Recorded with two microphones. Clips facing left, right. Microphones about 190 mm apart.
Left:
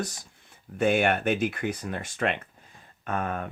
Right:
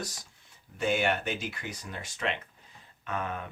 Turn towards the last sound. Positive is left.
turn(degrees=50)  # may be behind; listen again after turning